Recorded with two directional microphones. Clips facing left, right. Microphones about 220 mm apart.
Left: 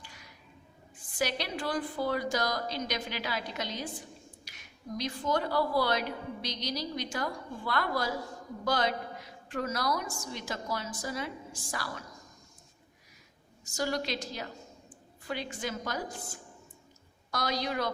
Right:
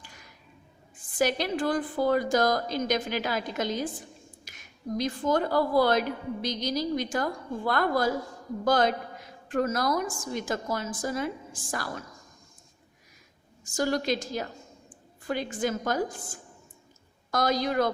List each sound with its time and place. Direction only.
1.2 s a woman's voice: 50° right (ahead or behind)
13.7 s a woman's voice: 50° right (ahead or behind)